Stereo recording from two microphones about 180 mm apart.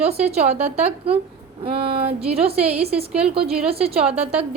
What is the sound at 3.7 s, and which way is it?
Speech, 35° right (ahead or behind).